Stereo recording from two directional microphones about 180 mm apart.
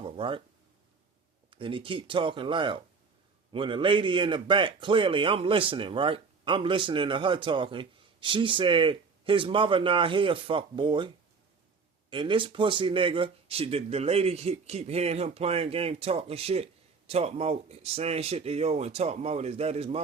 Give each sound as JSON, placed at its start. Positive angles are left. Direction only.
{"t": 0.0, "sound": "a sound", "side_deg": -30}
{"t": 1.5, "sound": "speech", "side_deg": -30}
{"t": 12.1, "sound": "speech", "side_deg": -25}